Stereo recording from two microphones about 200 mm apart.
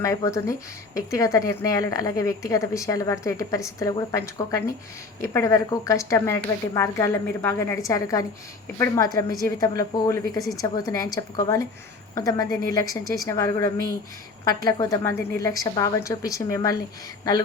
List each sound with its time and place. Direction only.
0.0 s a woman's voice: 15° left (ahead or behind)